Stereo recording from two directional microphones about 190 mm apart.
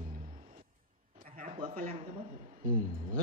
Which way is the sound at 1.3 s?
45° right (ahead or behind).